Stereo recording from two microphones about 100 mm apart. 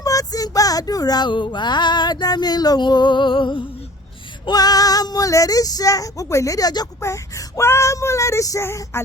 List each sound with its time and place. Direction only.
0.0 s a sound: 35° left (ahead or behind); by 3.6 s 55° left (ahead or behind)
4.4 s speech: 40° left (ahead or behind)
7.0 s child singing: 30° left (ahead or behind)